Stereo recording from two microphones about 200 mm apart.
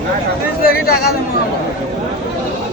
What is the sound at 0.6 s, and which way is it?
Speech, 50° left (ahead or behind).